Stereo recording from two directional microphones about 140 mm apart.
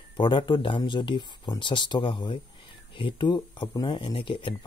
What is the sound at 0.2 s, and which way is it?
Speech, 35° left (ahead or behind).